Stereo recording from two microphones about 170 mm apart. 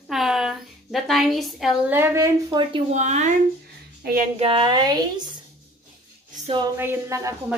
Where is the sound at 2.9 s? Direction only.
45° right (ahead or behind).